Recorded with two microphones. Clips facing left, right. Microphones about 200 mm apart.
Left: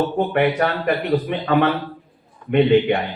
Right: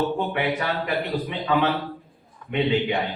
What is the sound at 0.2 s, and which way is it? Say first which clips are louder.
A man's voice: left 7 dB; 60° left (ahead or behind).